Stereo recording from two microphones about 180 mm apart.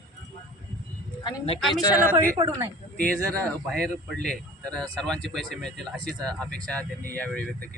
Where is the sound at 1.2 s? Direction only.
30° left (ahead or behind).